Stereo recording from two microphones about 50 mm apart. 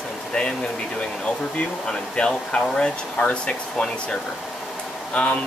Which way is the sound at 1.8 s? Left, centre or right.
Centre.